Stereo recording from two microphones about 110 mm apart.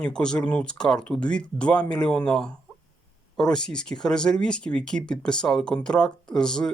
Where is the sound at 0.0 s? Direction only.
10° left (ahead or behind).